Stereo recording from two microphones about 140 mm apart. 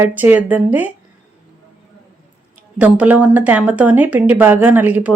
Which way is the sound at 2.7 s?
10° right (ahead or behind).